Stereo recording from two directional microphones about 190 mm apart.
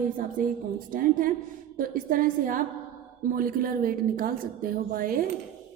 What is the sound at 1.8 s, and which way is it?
A woman's voice, 45° right (ahead or behind).